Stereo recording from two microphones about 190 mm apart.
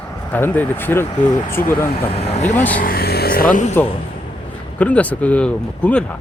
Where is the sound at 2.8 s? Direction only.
50° left (ahead or behind).